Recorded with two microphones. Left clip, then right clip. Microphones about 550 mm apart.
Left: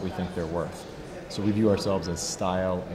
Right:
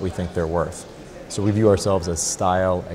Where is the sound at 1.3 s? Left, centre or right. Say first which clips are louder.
Right 7 dB; right.